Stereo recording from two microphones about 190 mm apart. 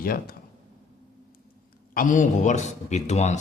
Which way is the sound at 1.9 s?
45° left (ahead or behind).